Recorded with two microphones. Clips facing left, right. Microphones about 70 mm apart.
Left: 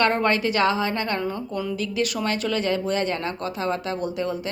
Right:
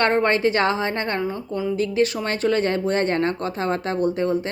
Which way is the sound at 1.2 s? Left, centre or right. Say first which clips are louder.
Right 2 dB; right.